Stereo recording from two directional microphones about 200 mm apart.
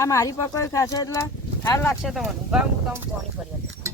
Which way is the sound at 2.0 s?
Centre (ahead or behind).